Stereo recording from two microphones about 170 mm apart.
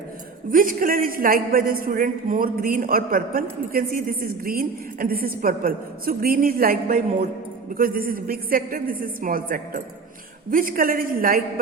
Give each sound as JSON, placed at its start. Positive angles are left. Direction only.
{"t": 0.5, "sound": "a woman's voice", "side_deg": -55}